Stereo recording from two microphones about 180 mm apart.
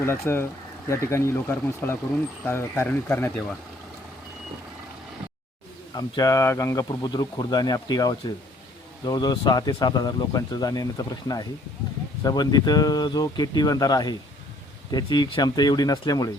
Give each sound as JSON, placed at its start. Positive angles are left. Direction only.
{"t": 0.0, "sound": "speech", "side_deg": 10}
{"t": 5.9, "sound": "speech", "side_deg": 20}